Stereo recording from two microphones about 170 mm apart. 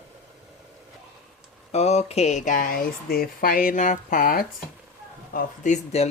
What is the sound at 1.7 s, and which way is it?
Speech, 40° left (ahead or behind).